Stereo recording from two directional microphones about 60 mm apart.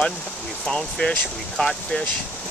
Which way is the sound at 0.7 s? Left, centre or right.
Centre.